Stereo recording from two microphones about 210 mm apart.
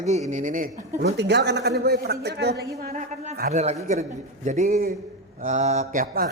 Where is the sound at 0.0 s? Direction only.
35° right (ahead or behind).